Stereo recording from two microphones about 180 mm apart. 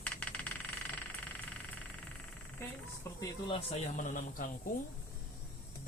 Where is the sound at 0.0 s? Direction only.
10° left (ahead or behind).